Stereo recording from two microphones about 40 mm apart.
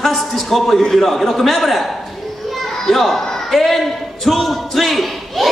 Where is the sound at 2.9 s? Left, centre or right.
Centre.